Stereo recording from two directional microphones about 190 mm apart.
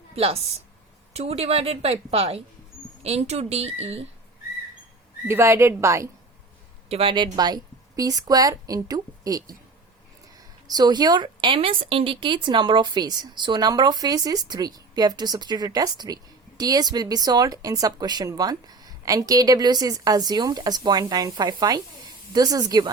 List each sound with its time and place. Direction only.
1.1 s a woman's voice: 35° right (ahead or behind)
5.2 s speech: 15° right (ahead or behind)
6.8 s a woman's voice: 30° right (ahead or behind)
10.7 s a woman's voice: 20° right (ahead or behind)